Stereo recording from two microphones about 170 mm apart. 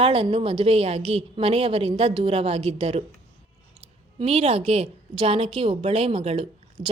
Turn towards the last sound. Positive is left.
turn(degrees=-35)  # may be behind; listen again after turning